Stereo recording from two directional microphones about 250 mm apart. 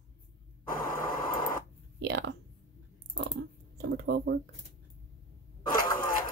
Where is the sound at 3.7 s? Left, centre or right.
Right.